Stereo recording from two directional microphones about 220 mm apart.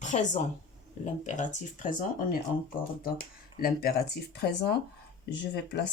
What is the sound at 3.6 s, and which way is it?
Speech, 45° left (ahead or behind).